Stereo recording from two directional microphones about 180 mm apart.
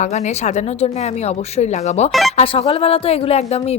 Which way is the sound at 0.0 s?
40° left (ahead or behind).